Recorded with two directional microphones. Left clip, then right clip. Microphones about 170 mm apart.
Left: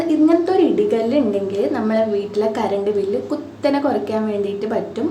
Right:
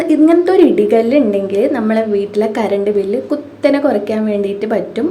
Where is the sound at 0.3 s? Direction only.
25° right (ahead or behind).